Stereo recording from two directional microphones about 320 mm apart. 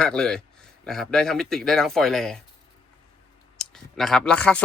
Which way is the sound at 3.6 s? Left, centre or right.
Centre.